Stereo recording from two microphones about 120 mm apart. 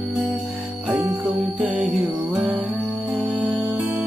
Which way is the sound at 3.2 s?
5° right (ahead or behind).